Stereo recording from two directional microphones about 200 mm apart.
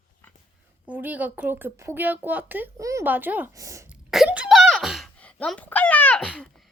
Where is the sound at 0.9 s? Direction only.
10° right (ahead or behind).